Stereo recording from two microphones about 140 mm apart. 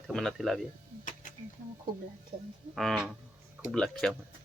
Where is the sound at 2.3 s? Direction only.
90° right.